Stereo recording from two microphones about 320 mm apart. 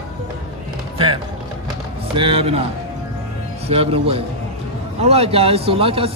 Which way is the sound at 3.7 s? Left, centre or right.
Centre.